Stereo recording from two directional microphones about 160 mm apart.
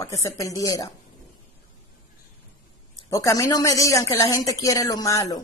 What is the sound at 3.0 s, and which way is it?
Speech, 20° left (ahead or behind).